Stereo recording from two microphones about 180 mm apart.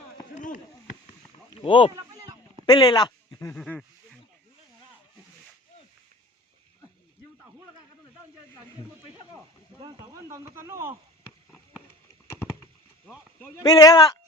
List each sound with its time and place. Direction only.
0.3 s chop: 45° left (ahead or behind)
1.5 s speech: 30° left (ahead or behind)
2.0 s a sound: 20° right (ahead or behind)
2.6 s speech: 20° left (ahead or behind)
3.6 s a sound: 5° left (ahead or behind)
9.8 s speech: 20° right (ahead or behind)
13.6 s speech: 20° left (ahead or behind)